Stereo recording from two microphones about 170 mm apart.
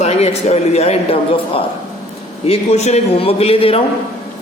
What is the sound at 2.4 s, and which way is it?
Speech, 35° left (ahead or behind).